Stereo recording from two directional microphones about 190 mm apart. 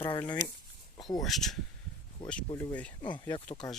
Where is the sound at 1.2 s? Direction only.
Centre (ahead or behind).